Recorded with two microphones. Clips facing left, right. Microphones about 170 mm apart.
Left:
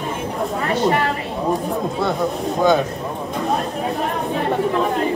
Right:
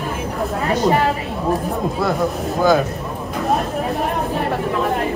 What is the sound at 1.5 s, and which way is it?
Speech, centre (ahead or behind).